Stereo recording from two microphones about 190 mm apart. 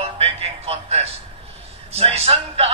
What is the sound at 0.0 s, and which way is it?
Music, 30° right (ahead or behind).